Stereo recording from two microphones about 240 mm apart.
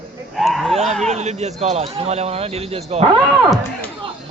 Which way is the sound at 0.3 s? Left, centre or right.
Centre.